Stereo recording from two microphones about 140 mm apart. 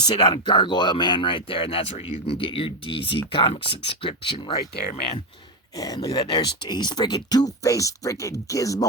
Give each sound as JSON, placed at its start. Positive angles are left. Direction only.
{"t": 0.1, "sound": "speech", "side_deg": 30}
{"t": 5.7, "sound": "speech", "side_deg": 25}